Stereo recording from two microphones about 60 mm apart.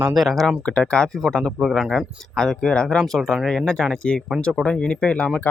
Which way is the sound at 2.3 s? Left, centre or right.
Centre.